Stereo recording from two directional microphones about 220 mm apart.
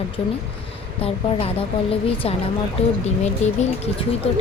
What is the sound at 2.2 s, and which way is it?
Speech, 25° left (ahead or behind).